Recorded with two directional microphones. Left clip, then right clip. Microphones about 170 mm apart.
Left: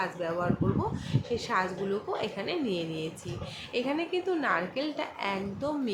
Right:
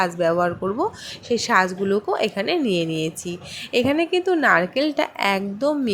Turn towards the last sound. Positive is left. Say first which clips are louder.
# right 10 dB
turn(degrees=-50)  # may be behind; listen again after turning